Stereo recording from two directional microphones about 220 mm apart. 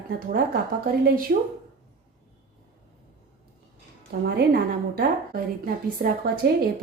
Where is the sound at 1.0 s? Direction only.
40° right (ahead or behind).